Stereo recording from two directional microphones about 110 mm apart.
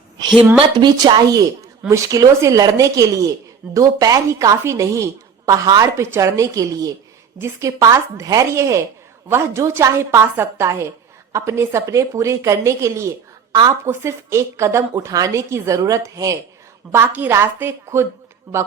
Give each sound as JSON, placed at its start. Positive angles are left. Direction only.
{"t": 0.3, "sound": "a woman's voice", "side_deg": -10}
{"t": 0.8, "sound": "a woman's voice", "side_deg": -40}
{"t": 13.5, "sound": "a woman's voice", "side_deg": -35}
{"t": 13.8, "sound": "a woman's voice", "side_deg": -25}
{"t": 18.5, "sound": "a woman's voice", "side_deg": -10}